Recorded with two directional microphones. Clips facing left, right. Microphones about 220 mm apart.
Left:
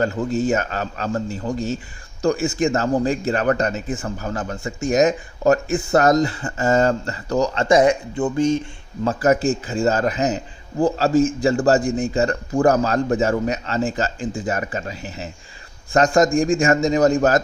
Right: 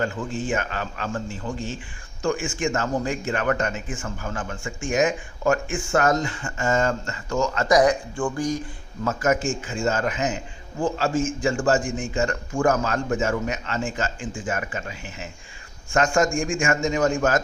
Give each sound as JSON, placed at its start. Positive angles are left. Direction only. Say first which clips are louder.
{"t": 0.0, "sound": "speech", "louder": "left 7 dB", "side_deg": 40}
{"t": 9.0, "sound": "speech", "louder": "left 5 dB", "side_deg": 35}